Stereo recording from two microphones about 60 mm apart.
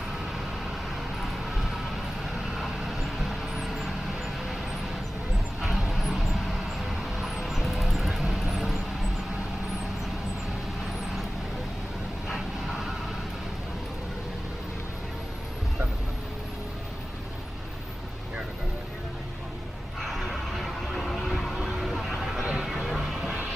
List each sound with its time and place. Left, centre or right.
2.3 s vehicle: centre
5.6 s vehicle: centre
12.3 s vehicle: centre
20.0 s a sound: centre
20.6 s vehicle: centre
22.5 s music: centre